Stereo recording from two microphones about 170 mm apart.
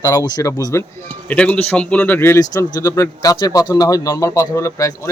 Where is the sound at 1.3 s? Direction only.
10° left (ahead or behind).